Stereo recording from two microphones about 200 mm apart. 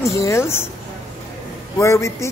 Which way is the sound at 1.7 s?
15° left (ahead or behind).